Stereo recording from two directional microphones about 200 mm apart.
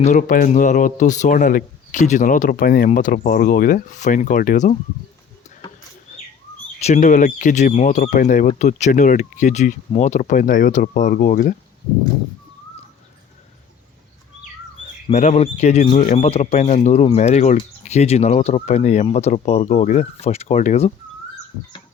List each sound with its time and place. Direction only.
0.0 s speech: 40° left (ahead or behind)
6.7 s speech: 35° left (ahead or behind)
15.1 s speech: 35° left (ahead or behind)